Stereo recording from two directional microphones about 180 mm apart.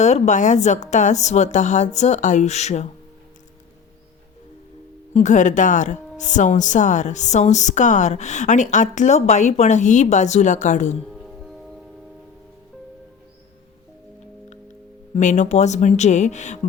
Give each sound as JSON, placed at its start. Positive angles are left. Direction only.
{"t": 0.0, "sound": "speech", "side_deg": 40}
{"t": 5.1, "sound": "speech", "side_deg": 40}
{"t": 11.1, "sound": "music", "side_deg": 0}
{"t": 15.1, "sound": "speech", "side_deg": 40}